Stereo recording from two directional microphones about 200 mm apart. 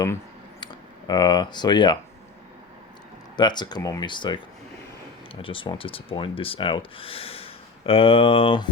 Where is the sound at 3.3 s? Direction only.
20° left (ahead or behind).